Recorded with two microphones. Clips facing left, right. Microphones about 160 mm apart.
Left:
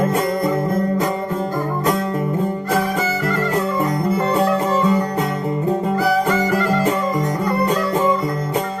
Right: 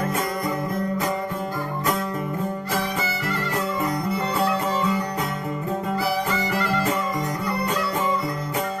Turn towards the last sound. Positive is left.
turn(degrees=50)  # may be behind; listen again after turning